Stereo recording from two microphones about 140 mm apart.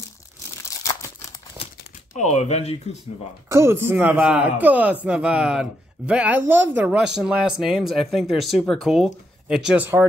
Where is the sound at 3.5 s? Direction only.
20° right (ahead or behind).